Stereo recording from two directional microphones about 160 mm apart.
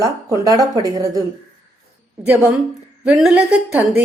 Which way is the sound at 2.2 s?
10° right (ahead or behind).